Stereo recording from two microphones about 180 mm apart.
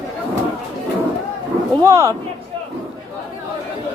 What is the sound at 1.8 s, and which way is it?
Speech, 20° right (ahead or behind).